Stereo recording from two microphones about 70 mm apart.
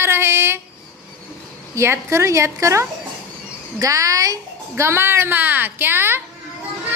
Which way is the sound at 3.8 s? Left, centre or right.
Right.